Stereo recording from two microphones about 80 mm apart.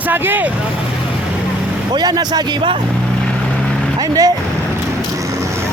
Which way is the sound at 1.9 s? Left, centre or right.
Right.